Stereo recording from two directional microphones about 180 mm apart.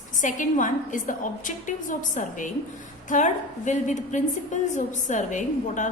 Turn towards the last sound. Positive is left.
turn(degrees=45)  # may be behind; listen again after turning